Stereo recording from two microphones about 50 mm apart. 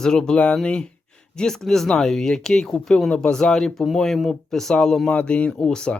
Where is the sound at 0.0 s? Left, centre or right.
Centre.